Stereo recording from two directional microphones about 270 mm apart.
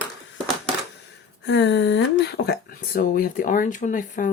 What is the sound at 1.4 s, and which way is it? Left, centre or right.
Speech, left.